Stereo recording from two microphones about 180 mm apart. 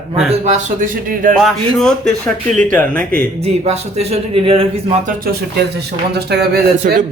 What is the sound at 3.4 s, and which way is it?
Speech, 35° right (ahead or behind).